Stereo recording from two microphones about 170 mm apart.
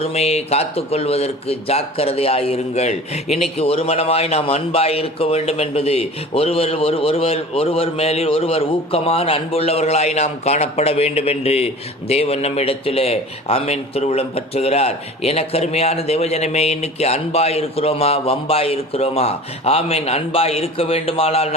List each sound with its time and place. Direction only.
0.0 s a man's voice: 40° left (ahead or behind)